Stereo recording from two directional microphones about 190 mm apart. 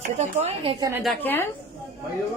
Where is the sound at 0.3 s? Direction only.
30° right (ahead or behind).